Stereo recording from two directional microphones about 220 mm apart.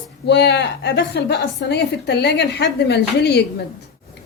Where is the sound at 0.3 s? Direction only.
50° left (ahead or behind).